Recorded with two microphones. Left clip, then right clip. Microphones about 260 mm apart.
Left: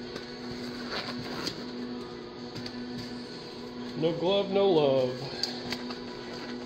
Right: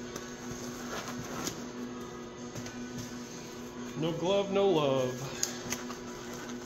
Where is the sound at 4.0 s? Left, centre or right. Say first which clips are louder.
Left 3 dB; right.